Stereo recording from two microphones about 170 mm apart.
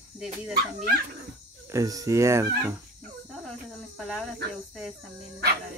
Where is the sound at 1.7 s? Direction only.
20° right (ahead or behind).